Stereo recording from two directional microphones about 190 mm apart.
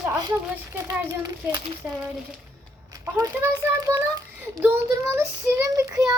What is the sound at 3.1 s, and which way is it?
Child singing, 15° right (ahead or behind).